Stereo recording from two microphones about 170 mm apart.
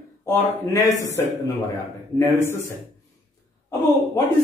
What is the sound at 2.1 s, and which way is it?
Speech, 15° left (ahead or behind).